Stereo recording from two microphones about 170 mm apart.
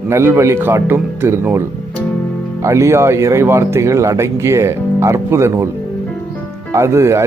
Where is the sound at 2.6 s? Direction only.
15° right (ahead or behind).